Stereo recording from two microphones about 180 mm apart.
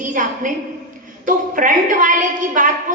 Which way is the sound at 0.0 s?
45° right (ahead or behind).